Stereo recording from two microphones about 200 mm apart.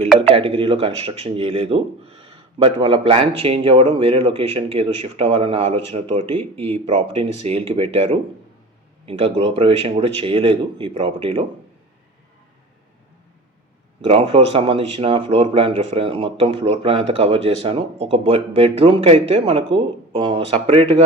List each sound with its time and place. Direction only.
0.3 s speech: 25° right (ahead or behind)
14.0 s speech: 30° right (ahead or behind)